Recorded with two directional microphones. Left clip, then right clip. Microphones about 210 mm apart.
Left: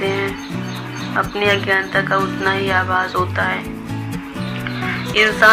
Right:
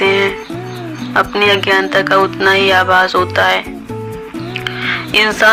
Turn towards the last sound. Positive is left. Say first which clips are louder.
# right 2 dB
turn(degrees=-40)  # may be behind; listen again after turning